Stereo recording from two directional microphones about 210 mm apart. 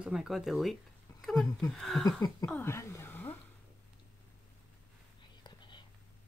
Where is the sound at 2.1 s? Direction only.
20° left (ahead or behind).